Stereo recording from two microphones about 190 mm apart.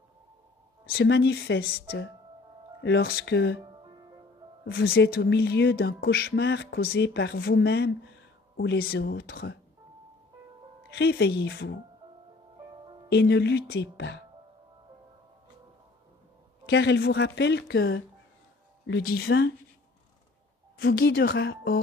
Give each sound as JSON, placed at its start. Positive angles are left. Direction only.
{"t": 0.9, "sound": "speech", "side_deg": 60}
{"t": 4.6, "sound": "speech", "side_deg": 55}
{"t": 11.0, "sound": "speech", "side_deg": 65}
{"t": 13.1, "sound": "speech", "side_deg": 65}
{"t": 16.6, "sound": "speech", "side_deg": 70}
{"t": 19.0, "sound": "speech", "side_deg": 55}
{"t": 20.7, "sound": "speech", "side_deg": 55}